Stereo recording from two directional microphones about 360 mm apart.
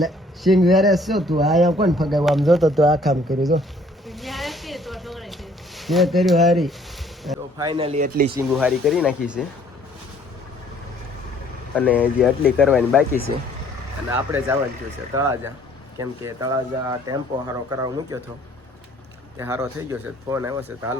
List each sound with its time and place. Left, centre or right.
0.0 s speech: centre
3.4 s snake: centre
7.6 s speech: centre
8.4 s speech: centre
11.7 s speech: centre
14.1 s speech: centre
19.4 s speech: centre